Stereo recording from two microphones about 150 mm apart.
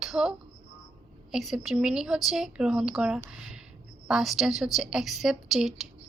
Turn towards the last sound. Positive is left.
turn(degrees=0)  # may be behind; listen again after turning